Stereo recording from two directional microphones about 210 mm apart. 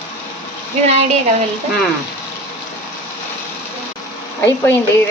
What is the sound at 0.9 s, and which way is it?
Speech, 30° right (ahead or behind).